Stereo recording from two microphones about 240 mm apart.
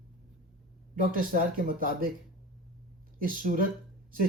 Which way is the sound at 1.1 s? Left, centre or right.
Right.